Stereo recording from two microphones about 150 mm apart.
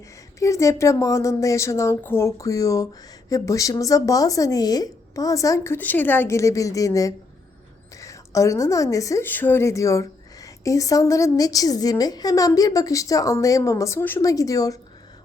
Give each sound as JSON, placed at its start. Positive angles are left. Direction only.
{"t": 0.3, "sound": "speech", "side_deg": 20}